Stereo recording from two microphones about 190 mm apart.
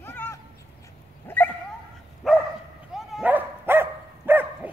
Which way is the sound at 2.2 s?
Centre (ahead or behind).